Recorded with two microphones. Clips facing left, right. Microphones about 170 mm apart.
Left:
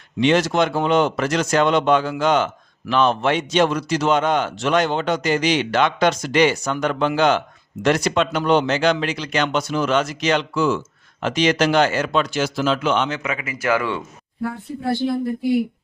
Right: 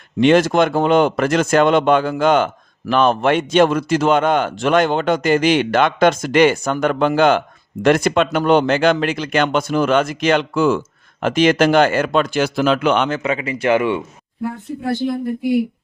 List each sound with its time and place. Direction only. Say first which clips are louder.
0.2 s a man's voice: right 4 dB; 50° right (ahead or behind)
13.1 s speech: right 6 dB; 35° right (ahead or behind)
14.7 s a man's voice: right 3 dB; 50° right (ahead or behind)